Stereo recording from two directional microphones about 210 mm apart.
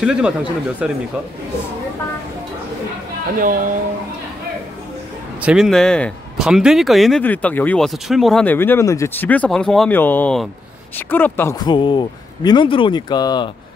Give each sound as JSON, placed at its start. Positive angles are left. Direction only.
{"t": 0.0, "sound": "speech", "side_deg": -5}
{"t": 5.4, "sound": "a man's voice", "side_deg": -5}